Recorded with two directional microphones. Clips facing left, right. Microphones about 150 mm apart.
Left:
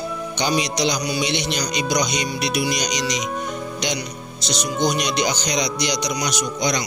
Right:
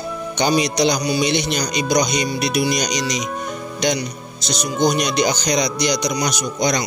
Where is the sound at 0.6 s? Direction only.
50° right (ahead or behind).